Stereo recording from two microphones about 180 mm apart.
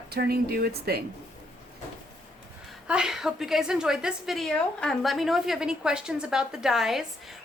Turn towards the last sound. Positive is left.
turn(degrees=0)  # may be behind; listen again after turning